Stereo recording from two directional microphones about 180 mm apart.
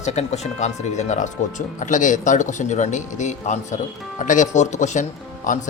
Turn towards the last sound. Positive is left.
turn(degrees=45)  # may be behind; listen again after turning